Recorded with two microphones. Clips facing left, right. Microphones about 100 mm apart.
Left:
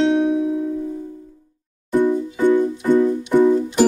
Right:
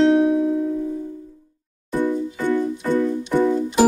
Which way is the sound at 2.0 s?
15° left (ahead or behind).